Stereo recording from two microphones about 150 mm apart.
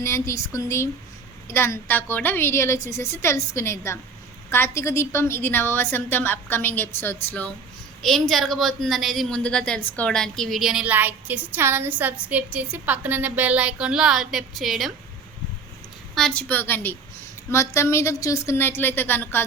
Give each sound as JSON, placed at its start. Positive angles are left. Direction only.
{"t": 0.0, "sound": "a woman's voice", "side_deg": 20}
{"t": 8.0, "sound": "a woman's voice", "side_deg": 0}
{"t": 16.1, "sound": "a woman's voice", "side_deg": 5}